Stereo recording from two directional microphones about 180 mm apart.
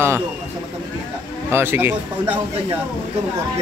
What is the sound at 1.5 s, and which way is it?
Speech, 10° right (ahead or behind).